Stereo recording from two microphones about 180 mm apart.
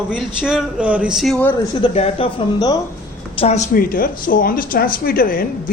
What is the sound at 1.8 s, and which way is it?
Speech, 30° left (ahead or behind).